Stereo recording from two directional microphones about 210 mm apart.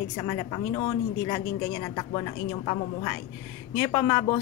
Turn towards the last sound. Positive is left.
turn(degrees=15)  # may be behind; listen again after turning